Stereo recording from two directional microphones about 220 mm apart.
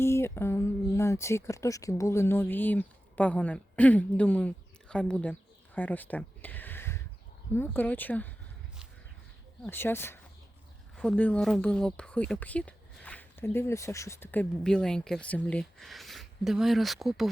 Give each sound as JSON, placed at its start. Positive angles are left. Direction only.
{"t": 0.0, "sound": "speech", "side_deg": 10}
{"t": 9.6, "sound": "speech", "side_deg": 10}